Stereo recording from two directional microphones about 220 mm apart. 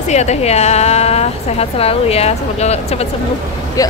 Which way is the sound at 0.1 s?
30° left (ahead or behind).